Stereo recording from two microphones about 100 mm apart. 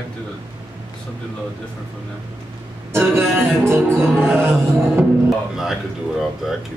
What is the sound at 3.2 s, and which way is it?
Music, 20° right (ahead or behind).